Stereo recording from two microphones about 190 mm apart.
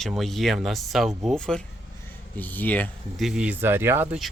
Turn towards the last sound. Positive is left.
turn(degrees=-10)  # may be behind; listen again after turning